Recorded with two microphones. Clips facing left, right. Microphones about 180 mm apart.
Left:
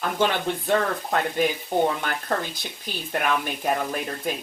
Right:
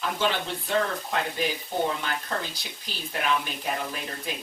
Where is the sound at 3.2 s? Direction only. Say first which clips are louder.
Left 2 dB; 50° left (ahead or behind).